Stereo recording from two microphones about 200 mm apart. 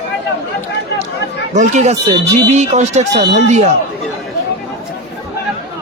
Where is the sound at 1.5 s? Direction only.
35° right (ahead or behind).